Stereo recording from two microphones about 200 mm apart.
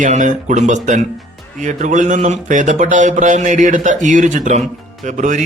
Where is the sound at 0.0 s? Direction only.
40° right (ahead or behind).